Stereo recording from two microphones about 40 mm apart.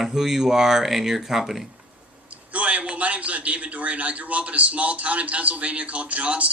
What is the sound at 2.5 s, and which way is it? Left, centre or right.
A man's voice, right.